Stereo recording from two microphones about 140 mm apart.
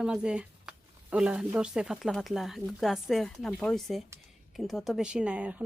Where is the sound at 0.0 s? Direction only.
5° right (ahead or behind).